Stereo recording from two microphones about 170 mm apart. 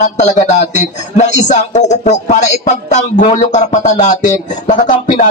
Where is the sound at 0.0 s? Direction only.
45° left (ahead or behind).